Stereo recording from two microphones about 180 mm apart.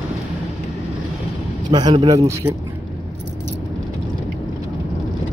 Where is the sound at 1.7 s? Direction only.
25° right (ahead or behind).